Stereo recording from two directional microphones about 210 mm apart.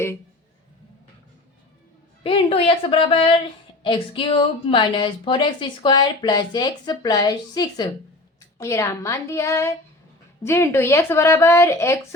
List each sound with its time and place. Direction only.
2.2 s a woman's voice: 25° left (ahead or behind)